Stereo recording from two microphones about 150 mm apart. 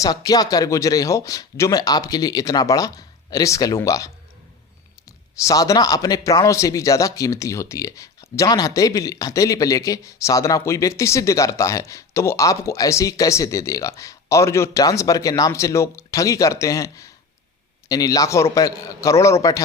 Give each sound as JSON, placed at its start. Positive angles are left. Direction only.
{"t": 0.0, "sound": "speech", "side_deg": 25}
{"t": 5.4, "sound": "speech", "side_deg": 20}